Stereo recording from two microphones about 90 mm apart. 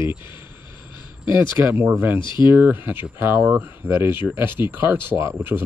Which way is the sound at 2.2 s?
60° left (ahead or behind).